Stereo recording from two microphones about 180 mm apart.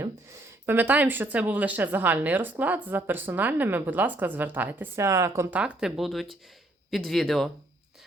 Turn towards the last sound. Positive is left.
turn(degrees=0)  # may be behind; listen again after turning